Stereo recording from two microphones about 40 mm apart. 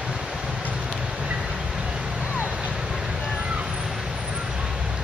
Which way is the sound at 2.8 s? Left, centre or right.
Centre.